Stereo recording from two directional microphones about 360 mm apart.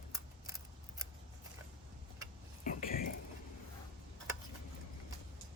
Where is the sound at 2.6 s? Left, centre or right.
Left.